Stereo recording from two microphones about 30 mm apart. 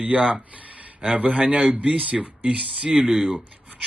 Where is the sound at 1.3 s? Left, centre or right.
Right.